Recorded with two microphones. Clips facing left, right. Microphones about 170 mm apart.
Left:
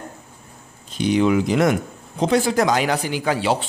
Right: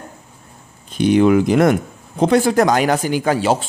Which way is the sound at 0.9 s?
55° right (ahead or behind).